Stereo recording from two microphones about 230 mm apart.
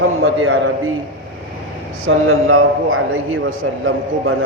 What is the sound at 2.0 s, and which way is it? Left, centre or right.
A man's voice, right.